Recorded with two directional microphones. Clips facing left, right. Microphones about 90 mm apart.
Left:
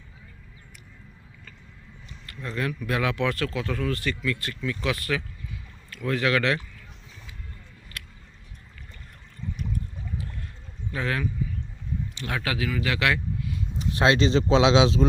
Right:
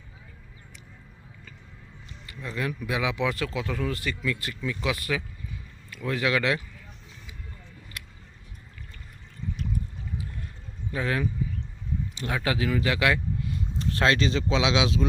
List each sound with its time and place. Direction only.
2.2 s a sound: 15° right (ahead or behind)
2.6 s speech: 10° right (ahead or behind)
10.9 s speech: 20° right (ahead or behind)
13.7 s a man's voice: 20° left (ahead or behind)